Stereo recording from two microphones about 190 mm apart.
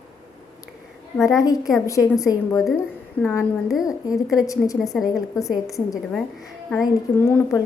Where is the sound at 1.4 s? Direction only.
20° left (ahead or behind).